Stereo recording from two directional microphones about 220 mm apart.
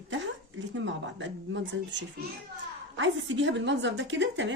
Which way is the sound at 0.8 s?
55° right (ahead or behind).